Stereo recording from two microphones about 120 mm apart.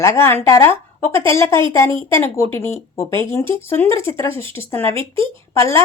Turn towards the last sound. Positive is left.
turn(degrees=20)  # may be behind; listen again after turning